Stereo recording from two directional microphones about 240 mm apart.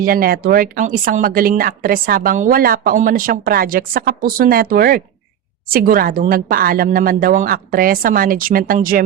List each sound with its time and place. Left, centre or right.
0.0 s speech: right